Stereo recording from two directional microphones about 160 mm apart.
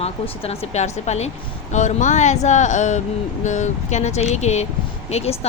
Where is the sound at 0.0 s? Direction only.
40° left (ahead or behind).